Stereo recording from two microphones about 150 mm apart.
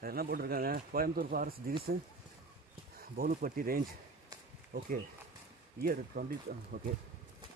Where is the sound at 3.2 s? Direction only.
70° right (ahead or behind).